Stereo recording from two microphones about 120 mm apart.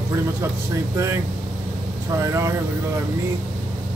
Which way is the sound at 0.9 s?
20° right (ahead or behind).